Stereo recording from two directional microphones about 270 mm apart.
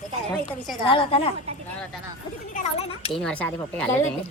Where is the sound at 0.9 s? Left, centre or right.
Centre.